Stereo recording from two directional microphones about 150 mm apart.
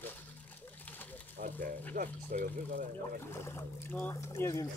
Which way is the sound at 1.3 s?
65° right (ahead or behind).